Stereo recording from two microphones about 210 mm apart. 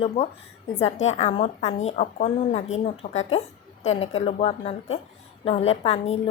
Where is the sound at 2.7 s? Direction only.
65° left (ahead or behind).